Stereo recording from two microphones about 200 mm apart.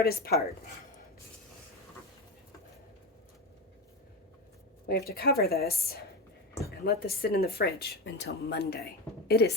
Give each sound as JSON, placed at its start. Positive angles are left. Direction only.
{"t": 0.0, "sound": "speech", "side_deg": 50}
{"t": 4.9, "sound": "speech", "side_deg": 50}